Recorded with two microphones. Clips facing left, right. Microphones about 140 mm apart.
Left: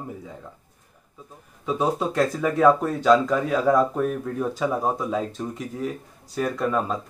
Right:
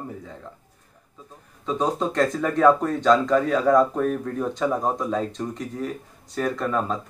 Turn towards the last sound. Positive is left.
turn(degrees=5)  # may be behind; listen again after turning